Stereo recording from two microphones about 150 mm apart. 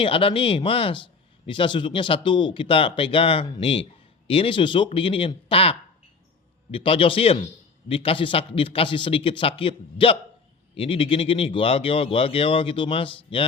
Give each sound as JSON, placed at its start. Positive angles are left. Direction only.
{"t": 0.0, "sound": "speech", "side_deg": 35}